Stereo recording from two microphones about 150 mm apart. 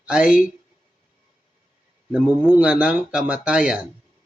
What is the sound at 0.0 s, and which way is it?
Speech, 5° right (ahead or behind).